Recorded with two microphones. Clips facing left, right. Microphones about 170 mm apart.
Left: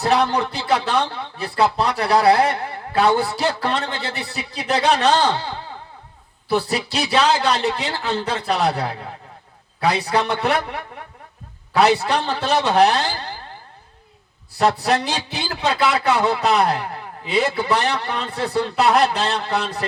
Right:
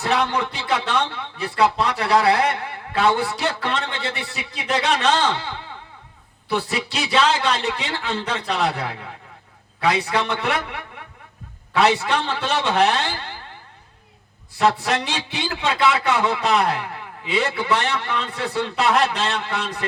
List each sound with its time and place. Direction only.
0.0 s a man's voice: 35° left (ahead or behind)
14.6 s a man's voice: 35° left (ahead or behind)